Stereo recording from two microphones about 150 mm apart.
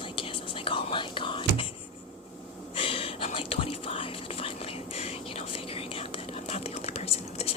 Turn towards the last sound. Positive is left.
turn(degrees=40)  # may be behind; listen again after turning